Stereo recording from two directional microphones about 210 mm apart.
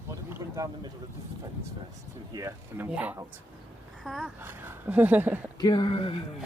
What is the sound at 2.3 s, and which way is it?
Speech, 15° right (ahead or behind).